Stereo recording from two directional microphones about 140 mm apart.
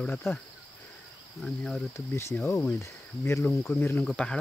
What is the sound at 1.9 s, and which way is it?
Speech, 20° left (ahead or behind).